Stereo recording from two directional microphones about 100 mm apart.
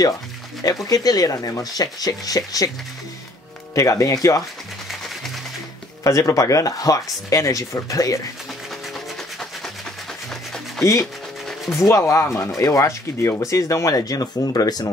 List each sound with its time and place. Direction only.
0.7 s speech: 40° left (ahead or behind)
3.7 s speech: 30° left (ahead or behind)
6.0 s speech: 30° left (ahead or behind)
10.8 s speech: 30° left (ahead or behind)